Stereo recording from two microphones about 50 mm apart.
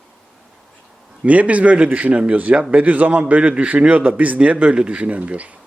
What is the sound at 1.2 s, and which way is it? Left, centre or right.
A man's voice, right.